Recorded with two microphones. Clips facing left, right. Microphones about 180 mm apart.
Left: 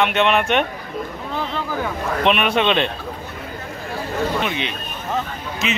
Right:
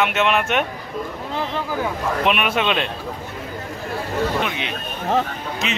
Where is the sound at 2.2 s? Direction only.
5° right (ahead or behind).